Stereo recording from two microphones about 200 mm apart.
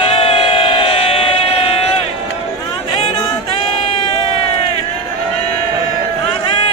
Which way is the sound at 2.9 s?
25° left (ahead or behind).